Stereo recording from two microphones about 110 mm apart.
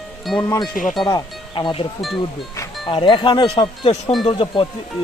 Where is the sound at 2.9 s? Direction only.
50° left (ahead or behind).